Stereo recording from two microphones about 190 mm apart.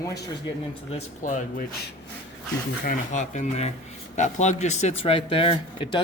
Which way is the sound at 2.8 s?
40° left (ahead or behind).